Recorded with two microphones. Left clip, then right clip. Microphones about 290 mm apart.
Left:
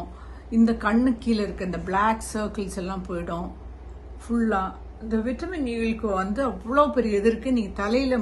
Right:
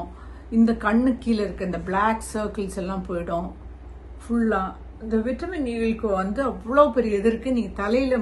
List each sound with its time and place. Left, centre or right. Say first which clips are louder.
0.5 s a woman's voice: right 1 dB; centre